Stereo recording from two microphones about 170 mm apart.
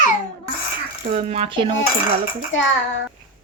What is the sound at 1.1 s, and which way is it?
Speech, 40° right (ahead or behind).